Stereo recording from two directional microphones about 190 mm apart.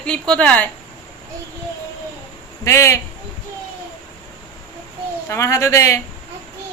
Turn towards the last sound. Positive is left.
turn(degrees=15)  # may be behind; listen again after turning